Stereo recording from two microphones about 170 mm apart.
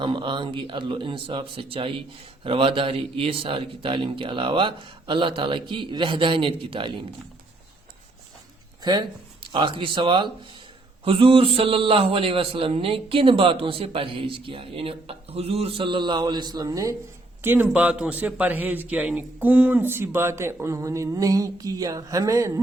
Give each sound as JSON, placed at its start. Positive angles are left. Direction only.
{"t": 0.0, "sound": "a man's voice", "side_deg": -30}
{"t": 8.8, "sound": "a man's voice", "side_deg": -25}